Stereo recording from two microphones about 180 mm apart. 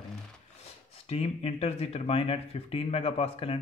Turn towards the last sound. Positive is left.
turn(degrees=30)  # may be behind; listen again after turning